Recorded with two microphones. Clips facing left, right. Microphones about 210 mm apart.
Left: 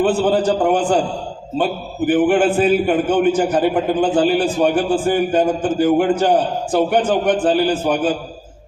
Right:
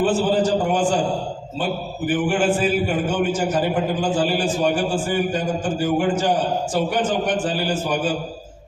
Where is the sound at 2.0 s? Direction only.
60° left (ahead or behind).